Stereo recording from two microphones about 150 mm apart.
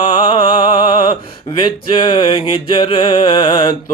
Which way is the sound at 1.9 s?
35° left (ahead or behind).